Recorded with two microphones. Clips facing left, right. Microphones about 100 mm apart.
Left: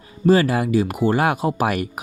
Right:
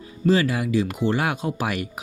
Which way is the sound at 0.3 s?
40° left (ahead or behind).